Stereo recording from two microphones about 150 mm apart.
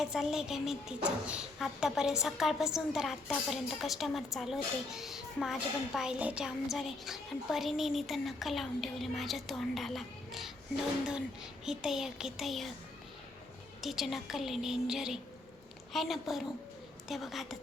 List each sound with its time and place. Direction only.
0.0 s a woman's voice: centre (ahead or behind)
11.6 s a woman's voice: 5° right (ahead or behind)
13.8 s a woman's voice: centre (ahead or behind)